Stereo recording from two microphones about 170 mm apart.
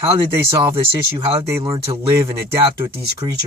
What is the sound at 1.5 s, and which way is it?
Speech, 20° right (ahead or behind).